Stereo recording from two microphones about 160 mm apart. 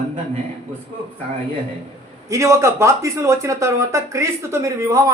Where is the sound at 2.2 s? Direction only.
20° right (ahead or behind).